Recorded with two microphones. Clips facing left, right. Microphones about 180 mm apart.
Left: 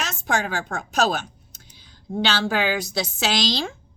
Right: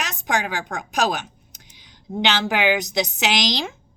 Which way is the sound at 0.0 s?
15° right (ahead or behind).